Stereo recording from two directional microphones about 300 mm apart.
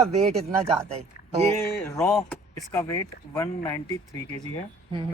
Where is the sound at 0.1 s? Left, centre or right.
Right.